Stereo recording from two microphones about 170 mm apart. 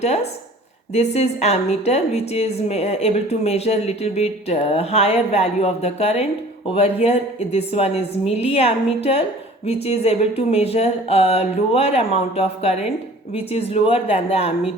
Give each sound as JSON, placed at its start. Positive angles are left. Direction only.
{"t": 0.0, "sound": "a woman's voice", "side_deg": 40}